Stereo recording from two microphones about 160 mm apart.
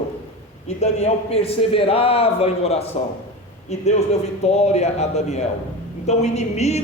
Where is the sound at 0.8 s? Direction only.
45° left (ahead or behind).